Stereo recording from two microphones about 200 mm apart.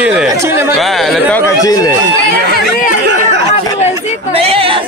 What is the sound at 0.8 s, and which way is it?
Speech, centre (ahead or behind).